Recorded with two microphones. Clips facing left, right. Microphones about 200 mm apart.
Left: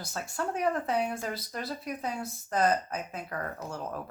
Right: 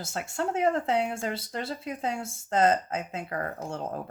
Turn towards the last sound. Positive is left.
turn(degrees=-25)  # may be behind; listen again after turning